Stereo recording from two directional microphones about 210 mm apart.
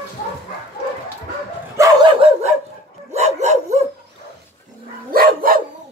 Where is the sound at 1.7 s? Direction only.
15° right (ahead or behind).